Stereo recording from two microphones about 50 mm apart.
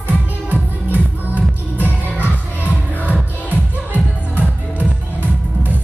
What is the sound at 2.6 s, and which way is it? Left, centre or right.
Music, left.